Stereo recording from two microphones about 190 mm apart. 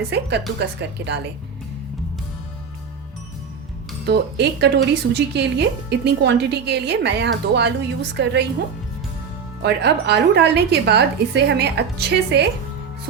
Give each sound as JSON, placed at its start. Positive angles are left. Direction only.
{"t": 0.1, "sound": "speech", "side_deg": -65}
{"t": 4.0, "sound": "speech", "side_deg": -60}
{"t": 9.6, "sound": "speech", "side_deg": -60}